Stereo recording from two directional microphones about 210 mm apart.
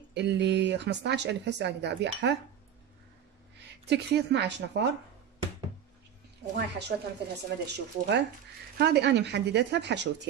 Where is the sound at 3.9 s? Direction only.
55° right (ahead or behind).